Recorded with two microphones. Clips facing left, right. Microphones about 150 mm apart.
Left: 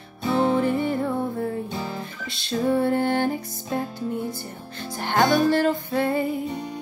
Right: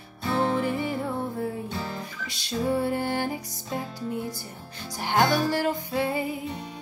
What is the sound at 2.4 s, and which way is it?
Music, 10° right (ahead or behind).